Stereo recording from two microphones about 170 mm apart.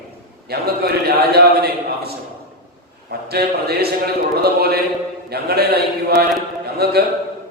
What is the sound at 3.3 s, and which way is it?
A man's voice, 70° right (ahead or behind).